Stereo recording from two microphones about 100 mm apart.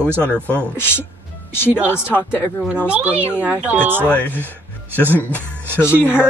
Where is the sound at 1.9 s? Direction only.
25° left (ahead or behind).